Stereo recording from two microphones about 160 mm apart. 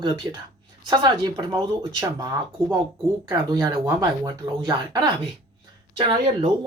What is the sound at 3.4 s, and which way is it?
Speech, 25° right (ahead or behind).